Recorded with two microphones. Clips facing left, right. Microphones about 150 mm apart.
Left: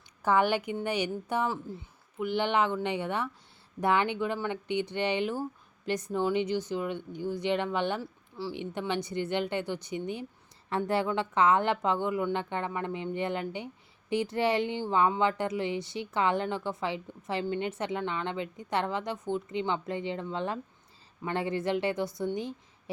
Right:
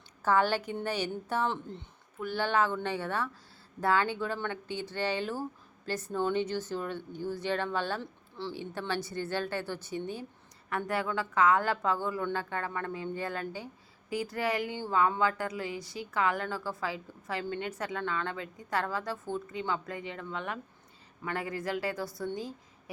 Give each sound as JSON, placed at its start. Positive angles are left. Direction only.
{"t": 0.2, "sound": "speech", "side_deg": 15}
{"t": 8.0, "sound": "a sound", "side_deg": 10}
{"t": 8.8, "sound": "speech", "side_deg": 20}
{"t": 10.7, "sound": "speech", "side_deg": 25}